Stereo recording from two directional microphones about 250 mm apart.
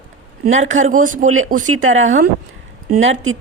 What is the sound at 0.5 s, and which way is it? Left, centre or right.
Speech, right.